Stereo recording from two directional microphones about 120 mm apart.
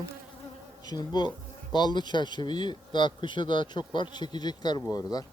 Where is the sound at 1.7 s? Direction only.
40° left (ahead or behind).